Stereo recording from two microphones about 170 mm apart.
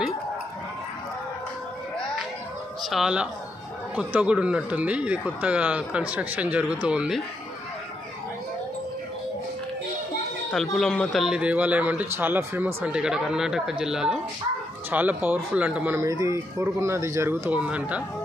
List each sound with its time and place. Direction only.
2.8 s speech: centre (ahead or behind)
10.5 s speech: centre (ahead or behind)